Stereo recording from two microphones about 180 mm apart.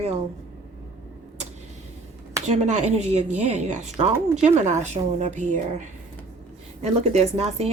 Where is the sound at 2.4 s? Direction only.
35° right (ahead or behind).